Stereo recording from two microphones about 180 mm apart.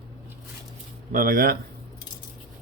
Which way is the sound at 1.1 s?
50° right (ahead or behind).